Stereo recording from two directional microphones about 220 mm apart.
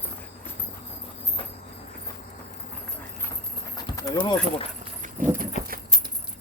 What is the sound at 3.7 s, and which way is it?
Horse, 15° left (ahead or behind).